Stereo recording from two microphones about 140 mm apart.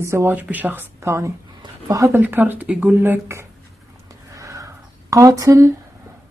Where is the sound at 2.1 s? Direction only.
15° right (ahead or behind).